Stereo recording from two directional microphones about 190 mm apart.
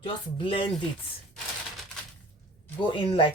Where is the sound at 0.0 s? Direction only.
25° left (ahead or behind).